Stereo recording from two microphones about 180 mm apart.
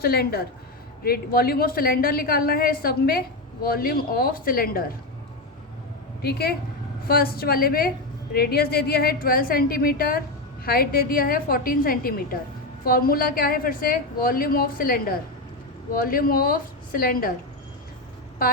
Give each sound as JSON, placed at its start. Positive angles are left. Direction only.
{"t": 0.0, "sound": "a woman's voice", "side_deg": 60}
{"t": 6.2, "sound": "a woman's voice", "side_deg": 60}